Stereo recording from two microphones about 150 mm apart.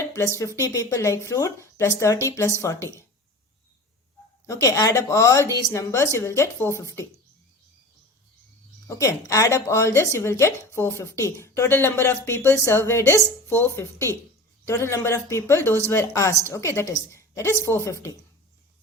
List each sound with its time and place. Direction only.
0.1 s speech: 20° left (ahead or behind)
4.4 s speech: 20° left (ahead or behind)
8.9 s speech: 20° left (ahead or behind)